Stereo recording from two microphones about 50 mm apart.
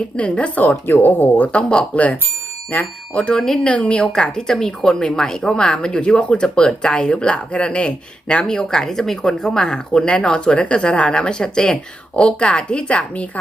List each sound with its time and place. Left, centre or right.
0.3 s speech: left
0.6 s speech: left
1.5 s speech: left
3.4 s a woman's voice: centre
3.7 s a woman's voice: left